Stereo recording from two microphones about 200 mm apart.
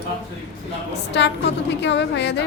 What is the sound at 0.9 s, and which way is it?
A woman's voice, 60° left (ahead or behind).